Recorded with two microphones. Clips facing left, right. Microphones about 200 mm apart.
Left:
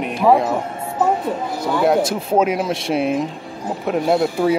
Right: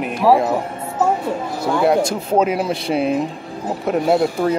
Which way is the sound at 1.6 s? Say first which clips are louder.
Right 1 dB; centre (ahead or behind).